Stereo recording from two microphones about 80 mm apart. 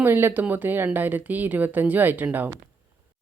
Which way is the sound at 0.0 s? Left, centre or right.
Right.